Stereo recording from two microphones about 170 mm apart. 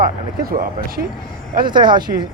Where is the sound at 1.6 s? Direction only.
25° right (ahead or behind).